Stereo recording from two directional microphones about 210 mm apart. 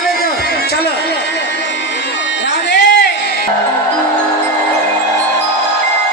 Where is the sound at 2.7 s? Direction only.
55° left (ahead or behind).